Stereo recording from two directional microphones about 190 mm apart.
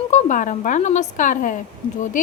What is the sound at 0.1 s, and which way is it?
A woman's voice, 40° left (ahead or behind).